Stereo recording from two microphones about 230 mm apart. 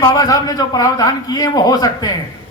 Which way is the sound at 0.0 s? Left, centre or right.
Centre.